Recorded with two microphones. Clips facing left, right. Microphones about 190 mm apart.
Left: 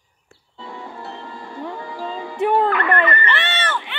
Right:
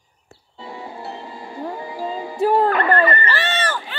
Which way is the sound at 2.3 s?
35° right (ahead or behind).